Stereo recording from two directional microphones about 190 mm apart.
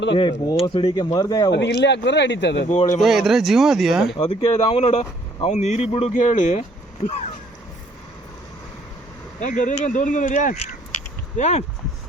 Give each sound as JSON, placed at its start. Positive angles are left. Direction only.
{"t": 0.1, "sound": "speech", "side_deg": 25}
{"t": 1.8, "sound": "speech", "side_deg": 65}
{"t": 2.6, "sound": "speech", "side_deg": 40}
{"t": 3.0, "sound": "speech", "side_deg": 0}
{"t": 4.2, "sound": "speech", "side_deg": 30}
{"t": 9.4, "sound": "speech", "side_deg": 45}